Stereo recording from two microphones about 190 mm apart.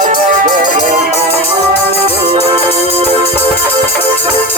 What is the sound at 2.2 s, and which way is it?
Music, 30° right (ahead or behind).